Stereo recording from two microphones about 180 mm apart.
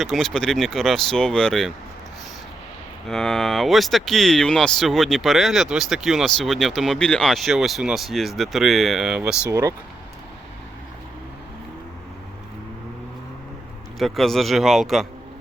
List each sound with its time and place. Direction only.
0.0 s speech: centre (ahead or behind)
3.1 s speech: 5° left (ahead or behind)
9.4 s speech: 15° right (ahead or behind)
14.0 s speech: centre (ahead or behind)